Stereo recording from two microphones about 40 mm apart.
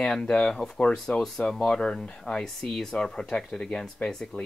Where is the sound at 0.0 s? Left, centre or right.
Centre.